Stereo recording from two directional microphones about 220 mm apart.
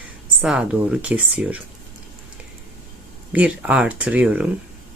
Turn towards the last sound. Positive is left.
turn(degrees=-5)  # may be behind; listen again after turning